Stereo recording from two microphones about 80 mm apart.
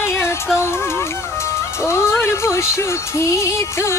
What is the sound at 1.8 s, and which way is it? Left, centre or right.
Speech, left.